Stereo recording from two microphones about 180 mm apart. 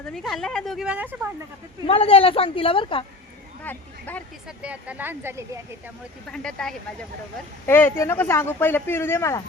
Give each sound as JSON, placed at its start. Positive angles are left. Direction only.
{"t": 0.0, "sound": "a woman's voice", "side_deg": 5}
{"t": 1.9, "sound": "a woman's voice", "side_deg": 30}
{"t": 3.6, "sound": "speech", "side_deg": 10}
{"t": 4.4, "sound": "speech", "side_deg": -5}
{"t": 6.3, "sound": "a woman's voice", "side_deg": 5}